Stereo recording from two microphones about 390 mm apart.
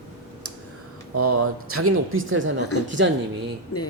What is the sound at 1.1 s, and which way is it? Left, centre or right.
Speech, right.